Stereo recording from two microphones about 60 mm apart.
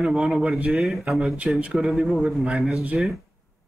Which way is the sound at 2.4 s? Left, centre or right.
Centre.